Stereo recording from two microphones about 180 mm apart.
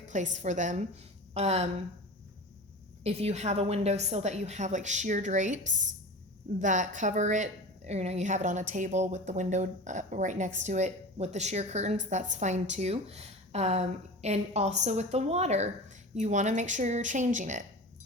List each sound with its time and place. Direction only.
0.1 s a woman's voice: 40° right (ahead or behind)
3.0 s a woman's voice: 35° right (ahead or behind)